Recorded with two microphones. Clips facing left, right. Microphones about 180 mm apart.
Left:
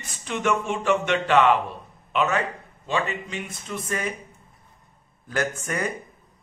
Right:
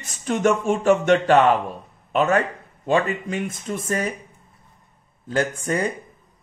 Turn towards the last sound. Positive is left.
turn(degrees=-30)  # may be behind; listen again after turning